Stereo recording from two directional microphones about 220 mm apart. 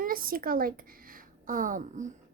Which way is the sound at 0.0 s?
40° right (ahead or behind).